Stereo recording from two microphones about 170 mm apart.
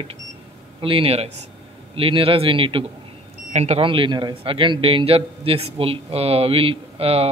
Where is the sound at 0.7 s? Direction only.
30° right (ahead or behind).